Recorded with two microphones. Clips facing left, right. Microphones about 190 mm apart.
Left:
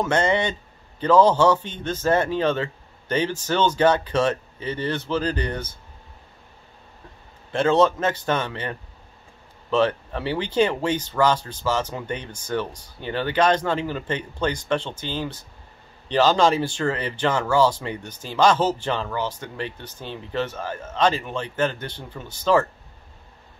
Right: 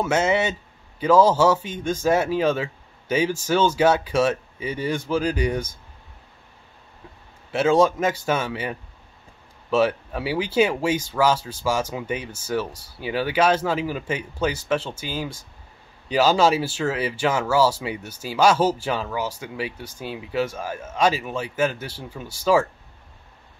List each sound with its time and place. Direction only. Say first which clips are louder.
0.0 s speech: even; 5° right (ahead or behind)
7.5 s speech: even; 10° right (ahead or behind)